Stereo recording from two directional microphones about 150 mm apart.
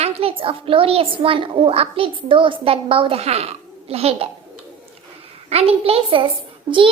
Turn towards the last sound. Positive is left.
turn(degrees=-35)  # may be behind; listen again after turning